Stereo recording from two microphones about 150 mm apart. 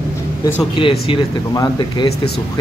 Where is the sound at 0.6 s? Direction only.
35° left (ahead or behind).